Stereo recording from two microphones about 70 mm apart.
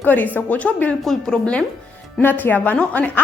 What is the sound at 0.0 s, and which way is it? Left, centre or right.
Speech, left.